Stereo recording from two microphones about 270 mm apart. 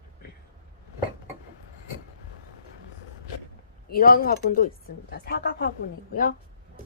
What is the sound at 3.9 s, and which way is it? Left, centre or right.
Speech, left.